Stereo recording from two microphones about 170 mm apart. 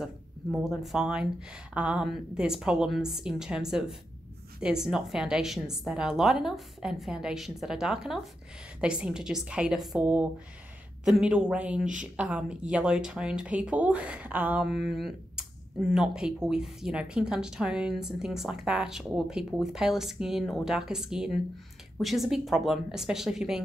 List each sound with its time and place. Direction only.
0.0 s speech: centre (ahead or behind)